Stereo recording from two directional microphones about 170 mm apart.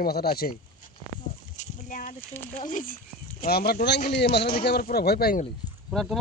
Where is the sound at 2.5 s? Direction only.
50° left (ahead or behind); by 5.4 s 65° left (ahead or behind).